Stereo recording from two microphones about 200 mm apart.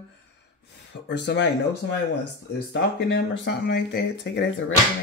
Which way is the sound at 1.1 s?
60° left (ahead or behind).